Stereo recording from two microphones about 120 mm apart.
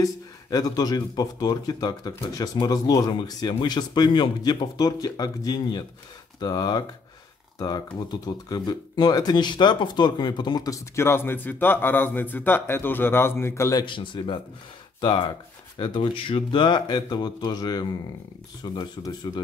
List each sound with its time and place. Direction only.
0.0 s speech: 30° left (ahead or behind)
13.8 s a man's voice: 45° left (ahead or behind)